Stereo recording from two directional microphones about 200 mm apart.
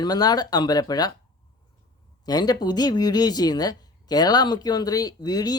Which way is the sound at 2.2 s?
20° left (ahead or behind).